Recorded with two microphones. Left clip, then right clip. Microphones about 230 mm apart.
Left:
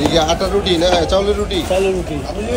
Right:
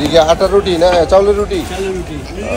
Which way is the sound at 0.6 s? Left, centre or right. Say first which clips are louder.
Right 4 dB; left.